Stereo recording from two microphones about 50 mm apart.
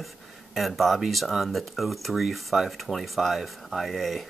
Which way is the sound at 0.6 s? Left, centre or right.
Centre.